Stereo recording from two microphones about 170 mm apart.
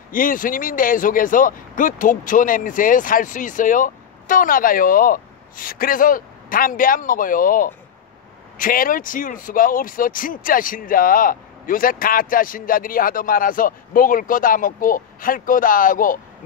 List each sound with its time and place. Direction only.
0.1 s speech: 55° left (ahead or behind)